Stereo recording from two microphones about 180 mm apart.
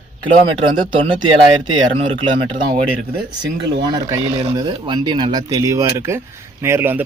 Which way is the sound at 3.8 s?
25° right (ahead or behind).